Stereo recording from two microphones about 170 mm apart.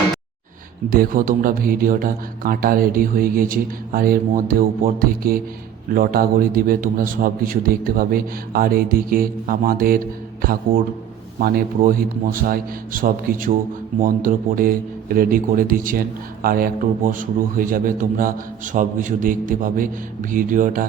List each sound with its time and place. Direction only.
0.9 s a man's voice: 55° right (ahead or behind)